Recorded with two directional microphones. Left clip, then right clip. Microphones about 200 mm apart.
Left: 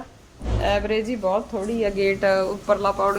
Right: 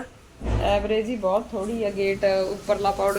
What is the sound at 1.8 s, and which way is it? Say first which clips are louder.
Speech: left 2 dB; 20° left (ahead or behind).